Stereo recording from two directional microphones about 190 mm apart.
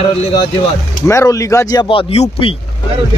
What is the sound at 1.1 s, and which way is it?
A man's voice, 15° left (ahead or behind).